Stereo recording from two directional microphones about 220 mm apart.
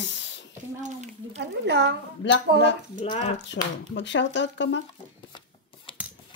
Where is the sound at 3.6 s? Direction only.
50° left (ahead or behind).